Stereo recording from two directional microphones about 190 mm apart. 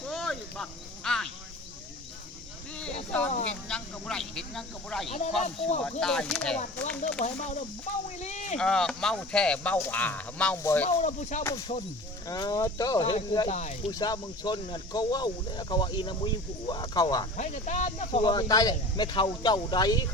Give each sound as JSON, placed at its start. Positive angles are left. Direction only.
{"t": 0.1, "sound": "a sound", "side_deg": 0}
{"t": 3.1, "sound": "speech", "side_deg": 5}
{"t": 5.4, "sound": "speech", "side_deg": 35}
{"t": 6.0, "sound": "speech", "side_deg": 5}
{"t": 7.2, "sound": "speech", "side_deg": 40}
{"t": 8.5, "sound": "speech", "side_deg": 5}
{"t": 10.8, "sound": "speech", "side_deg": 40}
{"t": 12.3, "sound": "speech", "side_deg": 20}
{"t": 13.5, "sound": "speech", "side_deg": 35}
{"t": 13.9, "sound": "speech", "side_deg": 20}
{"t": 17.3, "sound": "speech", "side_deg": 40}